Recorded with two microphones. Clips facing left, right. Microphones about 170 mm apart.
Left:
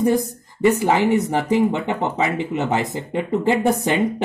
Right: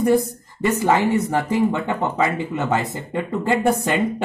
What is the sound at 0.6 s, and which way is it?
Speech, 15° left (ahead or behind).